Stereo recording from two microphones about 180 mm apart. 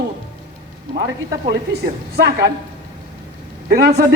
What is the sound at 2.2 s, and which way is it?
Speech, 65° right (ahead or behind).